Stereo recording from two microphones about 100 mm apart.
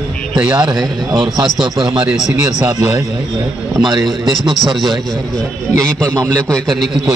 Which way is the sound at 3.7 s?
40° right (ahead or behind).